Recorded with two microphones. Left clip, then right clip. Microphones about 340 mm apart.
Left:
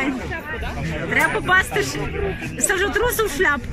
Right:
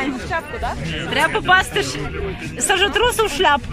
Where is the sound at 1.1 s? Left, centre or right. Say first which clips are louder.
Right 2 dB; centre.